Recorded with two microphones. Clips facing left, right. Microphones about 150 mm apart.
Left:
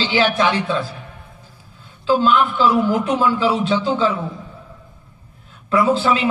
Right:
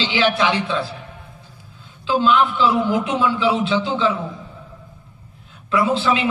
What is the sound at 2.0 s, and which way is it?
A man's voice, 45° left (ahead or behind).